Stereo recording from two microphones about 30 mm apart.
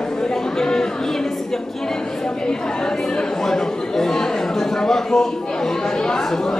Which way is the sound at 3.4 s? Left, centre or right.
Centre.